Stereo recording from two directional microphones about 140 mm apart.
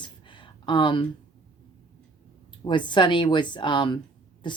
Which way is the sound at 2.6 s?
35° left (ahead or behind).